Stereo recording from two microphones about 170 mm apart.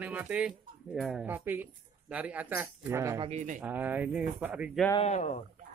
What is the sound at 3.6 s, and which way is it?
Speech, 10° right (ahead or behind).